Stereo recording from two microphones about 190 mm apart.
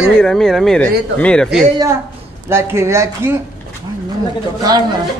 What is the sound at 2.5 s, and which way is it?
Speech, 15° right (ahead or behind).